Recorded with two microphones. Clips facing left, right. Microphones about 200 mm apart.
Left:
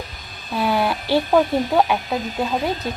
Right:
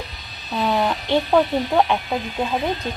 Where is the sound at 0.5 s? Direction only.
5° left (ahead or behind).